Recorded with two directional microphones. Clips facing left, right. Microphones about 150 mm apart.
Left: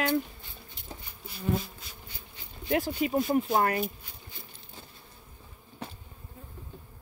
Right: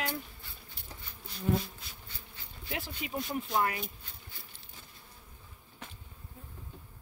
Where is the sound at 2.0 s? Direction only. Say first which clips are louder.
Left 3 dB; 15° left (ahead or behind).